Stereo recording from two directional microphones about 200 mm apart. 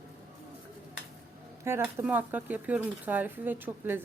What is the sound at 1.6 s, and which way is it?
Speech, 10° right (ahead or behind).